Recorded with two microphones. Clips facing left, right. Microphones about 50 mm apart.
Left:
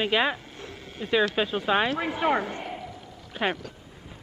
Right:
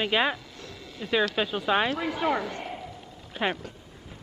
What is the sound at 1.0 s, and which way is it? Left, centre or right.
Speech, centre.